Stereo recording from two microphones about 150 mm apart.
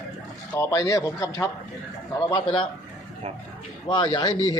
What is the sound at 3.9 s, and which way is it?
Speech, 30° left (ahead or behind).